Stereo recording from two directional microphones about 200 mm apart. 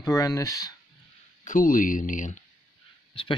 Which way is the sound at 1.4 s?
40° left (ahead or behind).